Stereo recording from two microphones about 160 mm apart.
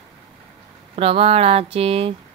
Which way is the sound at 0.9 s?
35° right (ahead or behind).